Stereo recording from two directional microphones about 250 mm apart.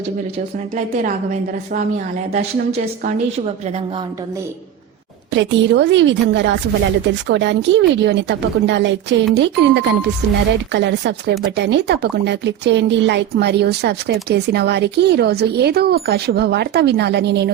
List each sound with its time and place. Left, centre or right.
5.3 s speech: right